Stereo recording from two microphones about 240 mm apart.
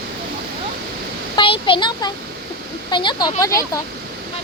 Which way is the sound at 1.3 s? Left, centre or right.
Left.